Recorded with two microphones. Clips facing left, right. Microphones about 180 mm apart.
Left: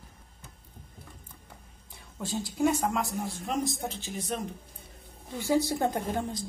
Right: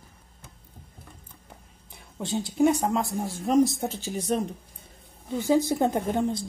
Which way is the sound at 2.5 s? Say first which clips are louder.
Right 5 dB; 25° right (ahead or behind).